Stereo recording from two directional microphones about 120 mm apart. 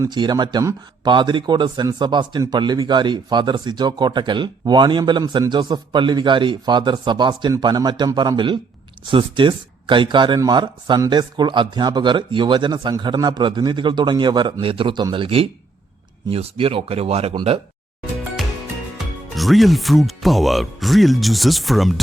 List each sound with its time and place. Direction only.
0.1 s speech: 40° right (ahead or behind); by 17.3 s 60° right (ahead or behind)
18.9 s speech: centre (ahead or behind)